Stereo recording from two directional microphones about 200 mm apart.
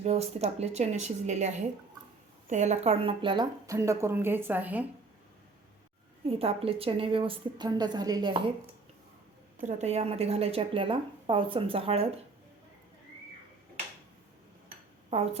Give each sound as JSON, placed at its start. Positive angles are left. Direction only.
{"t": 0.0, "sound": "a woman's voice", "side_deg": -30}
{"t": 6.2, "sound": "speech", "side_deg": -30}
{"t": 9.6, "sound": "speech", "side_deg": -35}
{"t": 15.1, "sound": "a woman's voice", "side_deg": -30}